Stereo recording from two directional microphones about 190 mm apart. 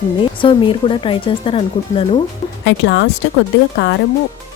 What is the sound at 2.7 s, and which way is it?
Speech, 65° left (ahead or behind).